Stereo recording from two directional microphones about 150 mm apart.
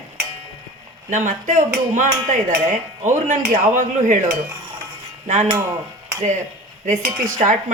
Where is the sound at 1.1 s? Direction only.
55° right (ahead or behind).